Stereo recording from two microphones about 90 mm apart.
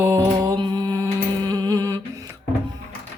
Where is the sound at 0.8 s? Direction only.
40° right (ahead or behind).